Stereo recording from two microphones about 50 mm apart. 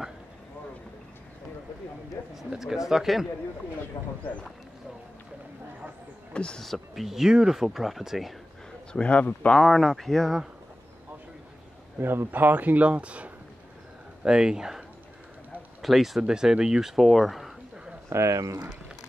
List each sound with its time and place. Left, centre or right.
2.3 s speech: centre
4.2 s speech: left
6.3 s speech: centre
6.6 s speech: centre
7.1 s speech: centre
8.9 s speech: left
9.6 s speech: centre
12.0 s speech: right
12.3 s speech: right
14.2 s speech: centre
15.8 s speech: centre
18.1 s speech: right